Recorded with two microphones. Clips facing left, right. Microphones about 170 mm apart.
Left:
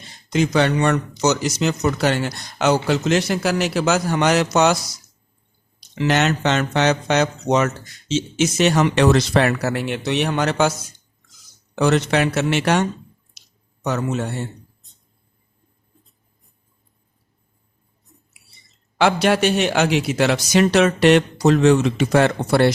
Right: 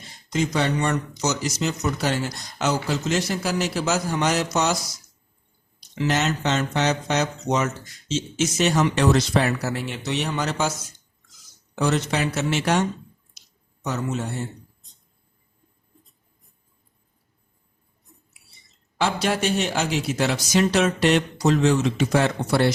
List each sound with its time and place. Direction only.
0.3 s speech: 75° left (ahead or behind)
6.0 s speech: 70° left (ahead or behind)
11.8 s speech: 70° left (ahead or behind)
13.8 s speech: 70° left (ahead or behind)
18.9 s speech: 70° left (ahead or behind)